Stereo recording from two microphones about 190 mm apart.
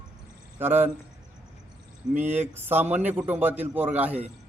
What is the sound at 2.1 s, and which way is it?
Speech, 10° right (ahead or behind).